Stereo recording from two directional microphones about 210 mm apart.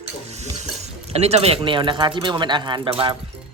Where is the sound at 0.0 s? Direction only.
30° right (ahead or behind).